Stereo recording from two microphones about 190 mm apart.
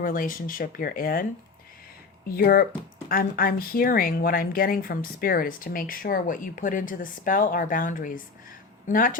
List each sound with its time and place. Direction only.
0.0 s speech: 45° left (ahead or behind)
2.3 s speech: 50° left (ahead or behind)